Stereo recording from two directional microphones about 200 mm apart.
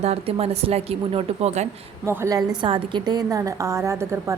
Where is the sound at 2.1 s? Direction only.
15° right (ahead or behind).